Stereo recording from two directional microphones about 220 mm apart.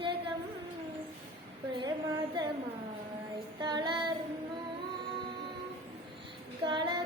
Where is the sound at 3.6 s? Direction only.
20° right (ahead or behind).